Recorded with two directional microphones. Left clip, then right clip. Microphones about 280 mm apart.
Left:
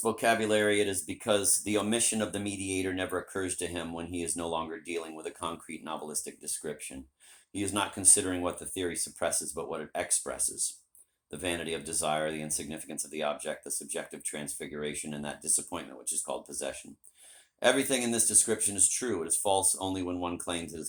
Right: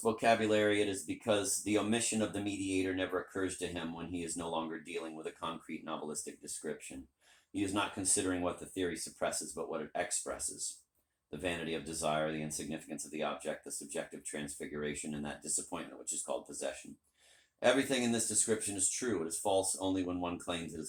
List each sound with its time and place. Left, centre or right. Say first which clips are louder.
0.0 s speech: left 3 dB; left